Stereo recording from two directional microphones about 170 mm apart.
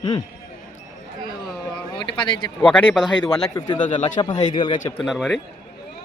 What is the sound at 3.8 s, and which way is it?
Speech, 45° left (ahead or behind).